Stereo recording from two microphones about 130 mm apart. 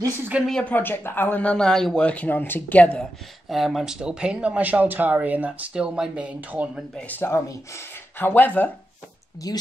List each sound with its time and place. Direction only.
0.5 s speech: 10° left (ahead or behind)
3.4 s speech: centre (ahead or behind)
7.0 s speech: 15° left (ahead or behind)
9.4 s speech: 30° left (ahead or behind)